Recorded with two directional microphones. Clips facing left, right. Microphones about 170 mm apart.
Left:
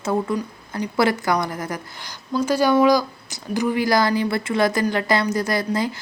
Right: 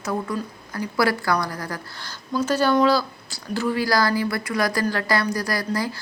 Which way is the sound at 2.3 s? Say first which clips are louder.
Left 2 dB; 10° left (ahead or behind).